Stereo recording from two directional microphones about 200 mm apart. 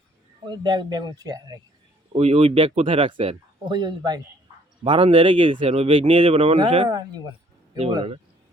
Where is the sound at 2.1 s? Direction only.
30° right (ahead or behind).